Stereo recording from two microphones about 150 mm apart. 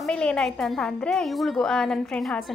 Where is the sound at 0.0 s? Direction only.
5° left (ahead or behind).